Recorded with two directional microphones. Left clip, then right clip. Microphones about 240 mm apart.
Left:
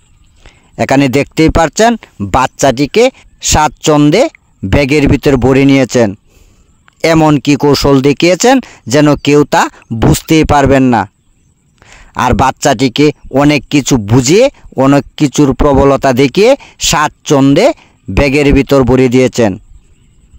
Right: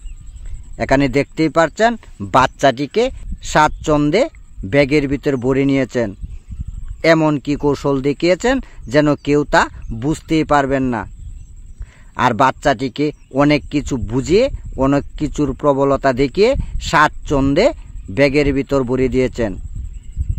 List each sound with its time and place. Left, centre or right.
0.4 s speech: left